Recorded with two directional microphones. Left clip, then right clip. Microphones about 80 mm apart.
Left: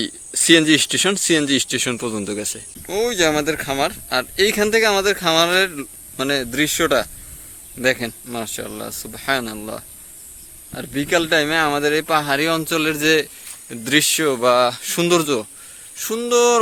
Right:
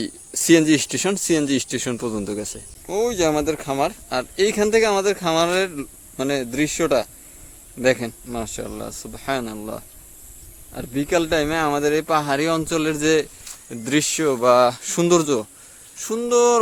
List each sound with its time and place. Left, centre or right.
0.0 s speech: centre; by 15.4 s right
16.0 s speech: centre